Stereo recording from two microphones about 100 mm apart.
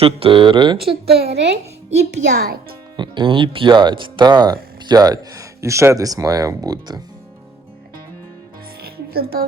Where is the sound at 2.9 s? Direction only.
50° right (ahead or behind).